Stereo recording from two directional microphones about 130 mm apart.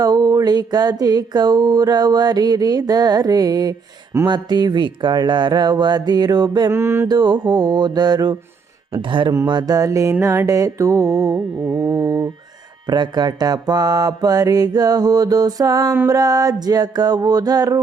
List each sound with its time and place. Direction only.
0.0 s mantra: 30° right (ahead or behind)
6.7 s mantra: 20° right (ahead or behind)
7.1 s mantra: 35° right (ahead or behind)